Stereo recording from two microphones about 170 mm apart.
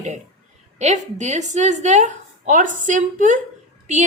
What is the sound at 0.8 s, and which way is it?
A woman's voice, 45° right (ahead or behind).